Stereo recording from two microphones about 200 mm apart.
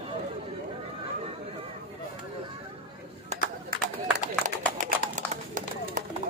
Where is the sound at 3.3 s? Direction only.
35° right (ahead or behind).